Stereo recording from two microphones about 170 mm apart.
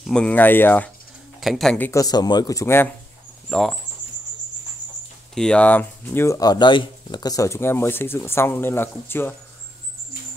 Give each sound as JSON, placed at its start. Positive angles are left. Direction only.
{"t": 0.0, "sound": "speech", "side_deg": 5}
{"t": 1.4, "sound": "speech", "side_deg": 0}
{"t": 1.9, "sound": "speech", "side_deg": 20}
{"t": 3.4, "sound": "speech", "side_deg": 0}
{"t": 5.3, "sound": "speech", "side_deg": 5}